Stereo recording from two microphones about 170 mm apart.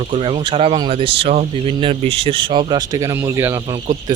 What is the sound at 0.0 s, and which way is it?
Speech, 30° right (ahead or behind).